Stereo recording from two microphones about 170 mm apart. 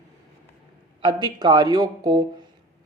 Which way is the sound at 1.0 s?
25° right (ahead or behind).